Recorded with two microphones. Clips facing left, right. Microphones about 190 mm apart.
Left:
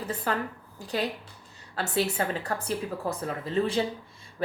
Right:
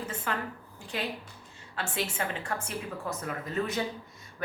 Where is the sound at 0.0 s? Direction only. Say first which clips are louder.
Left 4 dB; 35° left (ahead or behind).